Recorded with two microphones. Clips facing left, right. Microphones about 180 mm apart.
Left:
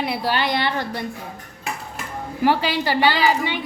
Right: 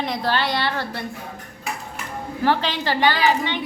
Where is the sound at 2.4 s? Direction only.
10° left (ahead or behind).